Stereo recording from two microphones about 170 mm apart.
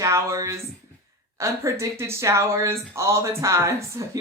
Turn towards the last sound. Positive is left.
turn(degrees=-15)  # may be behind; listen again after turning